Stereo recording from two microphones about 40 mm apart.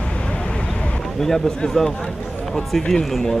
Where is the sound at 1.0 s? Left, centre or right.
Centre.